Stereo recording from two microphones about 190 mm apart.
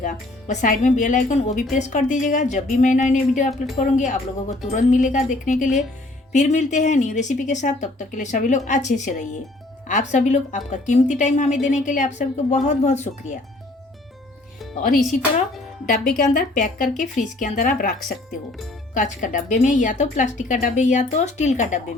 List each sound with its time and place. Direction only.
0.0 s a woman's voice: 40° left (ahead or behind)
16.1 s speech: 45° left (ahead or behind)
18.0 s speech: centre (ahead or behind)
18.9 s a woman's voice: 45° left (ahead or behind)